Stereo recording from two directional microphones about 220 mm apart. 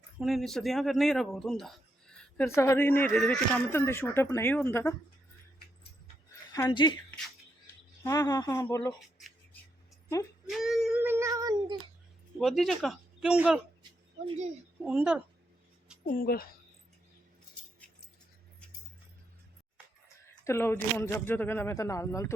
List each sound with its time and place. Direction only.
0.2 s speech: centre (ahead or behind)
6.5 s speech: 20° left (ahead or behind)
8.0 s speech: 15° left (ahead or behind)
10.5 s cat: centre (ahead or behind)
12.4 s speech: centre (ahead or behind)
14.3 s speech: 30° right (ahead or behind)
14.8 s speech: 5° right (ahead or behind)
16.1 s speech: 40° left (ahead or behind)
20.2 s speech: 10° left (ahead or behind)